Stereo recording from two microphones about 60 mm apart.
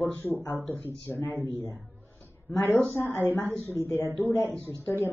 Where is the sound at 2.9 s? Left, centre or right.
Left.